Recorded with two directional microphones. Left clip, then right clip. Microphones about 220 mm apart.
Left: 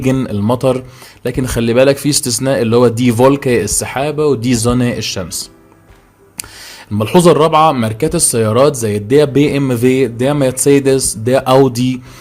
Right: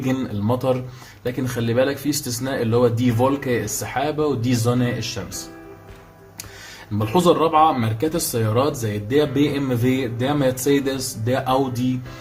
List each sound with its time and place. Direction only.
0.0 s speech: 40° left (ahead or behind)
7.0 s speech: 40° left (ahead or behind)